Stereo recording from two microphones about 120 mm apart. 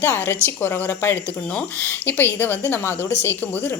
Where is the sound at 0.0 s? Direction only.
15° left (ahead or behind).